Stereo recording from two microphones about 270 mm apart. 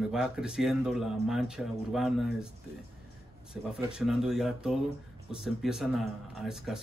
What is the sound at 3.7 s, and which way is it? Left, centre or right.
Speech, centre.